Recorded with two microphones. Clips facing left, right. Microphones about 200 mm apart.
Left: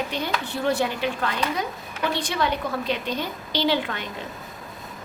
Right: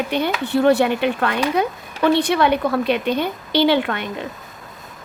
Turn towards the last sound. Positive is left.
turn(degrees=-60)  # may be behind; listen again after turning